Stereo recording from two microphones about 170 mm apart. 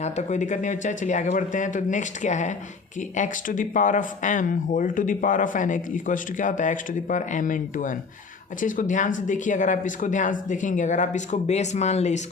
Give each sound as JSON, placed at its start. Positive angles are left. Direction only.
{"t": 0.0, "sound": "speech", "side_deg": 45}